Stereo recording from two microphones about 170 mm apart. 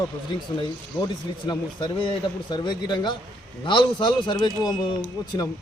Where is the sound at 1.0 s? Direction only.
25° left (ahead or behind).